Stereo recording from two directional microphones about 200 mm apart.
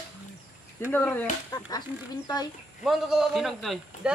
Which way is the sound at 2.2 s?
20° left (ahead or behind).